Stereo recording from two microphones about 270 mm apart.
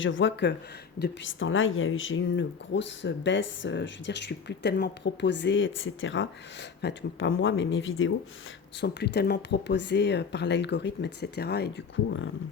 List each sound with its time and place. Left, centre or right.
0.0 s speech: left